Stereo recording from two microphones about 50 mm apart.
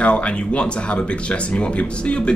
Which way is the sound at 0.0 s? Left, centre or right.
Left.